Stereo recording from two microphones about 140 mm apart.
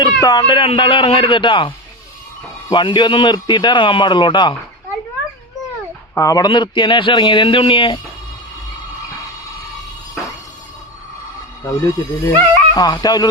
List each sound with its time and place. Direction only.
0.0 s a man's voice: 30° left (ahead or behind)
6.1 s a man's voice: 25° left (ahead or behind)
11.6 s speech: 25° left (ahead or behind)